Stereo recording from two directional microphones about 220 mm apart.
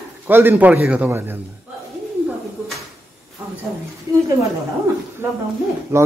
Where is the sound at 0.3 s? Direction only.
10° right (ahead or behind).